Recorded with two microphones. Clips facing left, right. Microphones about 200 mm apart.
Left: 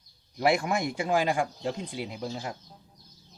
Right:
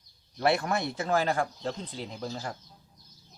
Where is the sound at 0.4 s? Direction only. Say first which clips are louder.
Left 1 dB; 10° left (ahead or behind).